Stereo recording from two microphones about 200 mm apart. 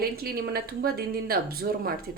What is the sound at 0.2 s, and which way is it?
Speech, 50° right (ahead or behind).